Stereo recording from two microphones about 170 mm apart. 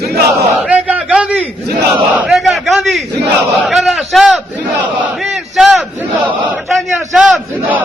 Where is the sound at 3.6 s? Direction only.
Centre (ahead or behind).